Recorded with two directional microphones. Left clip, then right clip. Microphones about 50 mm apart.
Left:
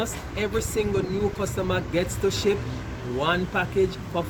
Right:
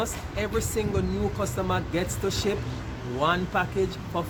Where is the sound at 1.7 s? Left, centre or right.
Right.